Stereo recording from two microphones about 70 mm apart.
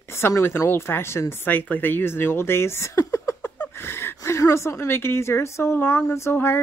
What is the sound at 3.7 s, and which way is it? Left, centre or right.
Speech, left.